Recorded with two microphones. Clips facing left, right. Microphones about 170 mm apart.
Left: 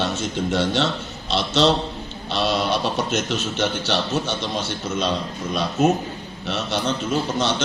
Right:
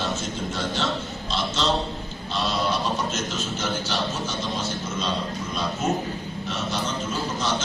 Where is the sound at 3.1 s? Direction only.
70° left (ahead or behind).